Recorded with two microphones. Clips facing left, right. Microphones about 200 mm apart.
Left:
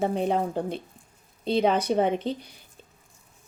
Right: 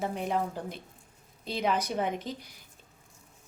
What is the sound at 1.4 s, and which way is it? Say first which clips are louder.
Speech: left 7 dB; 30° left (ahead or behind).